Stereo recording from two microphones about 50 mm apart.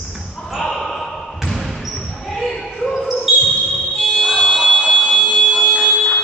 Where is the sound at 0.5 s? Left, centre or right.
Centre.